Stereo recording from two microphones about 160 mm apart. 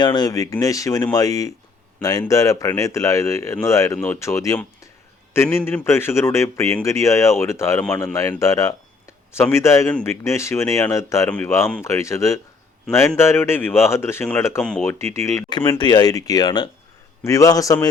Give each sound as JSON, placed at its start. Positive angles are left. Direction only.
{"t": 0.0, "sound": "a man's voice", "side_deg": 25}